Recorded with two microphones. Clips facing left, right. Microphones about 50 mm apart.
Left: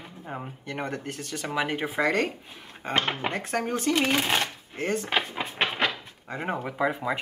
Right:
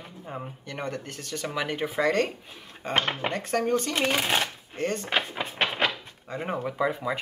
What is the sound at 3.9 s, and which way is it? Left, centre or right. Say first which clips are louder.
Speech: left 1 dB; centre.